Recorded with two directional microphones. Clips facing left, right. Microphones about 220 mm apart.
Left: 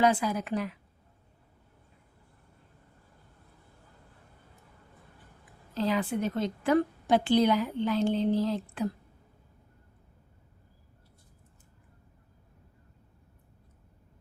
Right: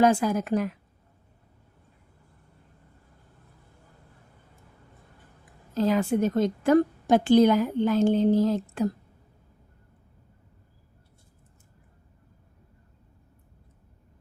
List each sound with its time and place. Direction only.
0.0 s a woman's voice: 45° right (ahead or behind)
5.7 s a woman's voice: 45° right (ahead or behind)